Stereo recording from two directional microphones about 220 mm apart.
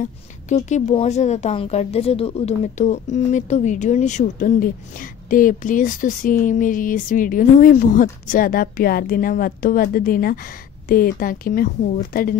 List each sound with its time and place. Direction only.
0.0 s speech: 35° left (ahead or behind)